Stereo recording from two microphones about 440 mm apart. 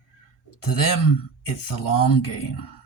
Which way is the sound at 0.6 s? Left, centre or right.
Left.